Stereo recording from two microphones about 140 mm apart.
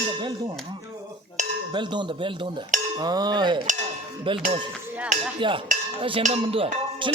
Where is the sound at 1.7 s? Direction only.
35° right (ahead or behind).